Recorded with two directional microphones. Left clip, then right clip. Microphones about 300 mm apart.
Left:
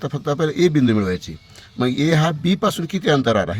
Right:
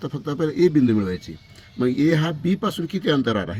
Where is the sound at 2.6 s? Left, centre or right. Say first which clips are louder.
Left 5 dB; left.